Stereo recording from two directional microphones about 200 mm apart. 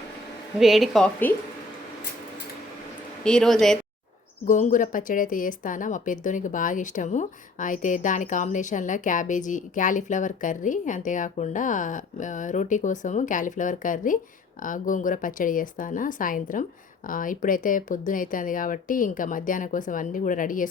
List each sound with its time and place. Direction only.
0.6 s speech: centre (ahead or behind)
3.2 s speech: 5° left (ahead or behind)
4.4 s speech: 40° left (ahead or behind)